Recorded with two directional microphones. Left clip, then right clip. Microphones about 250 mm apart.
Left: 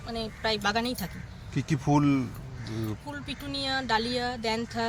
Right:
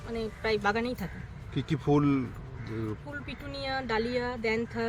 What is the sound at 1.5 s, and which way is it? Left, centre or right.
Speech, left.